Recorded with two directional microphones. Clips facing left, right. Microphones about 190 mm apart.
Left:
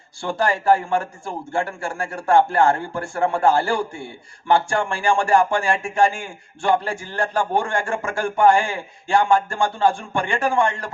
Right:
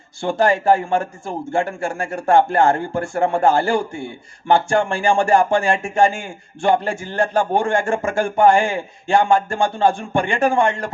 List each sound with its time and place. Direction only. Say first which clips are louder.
0.2 s a man's voice: right 5 dB; 20° right (ahead or behind)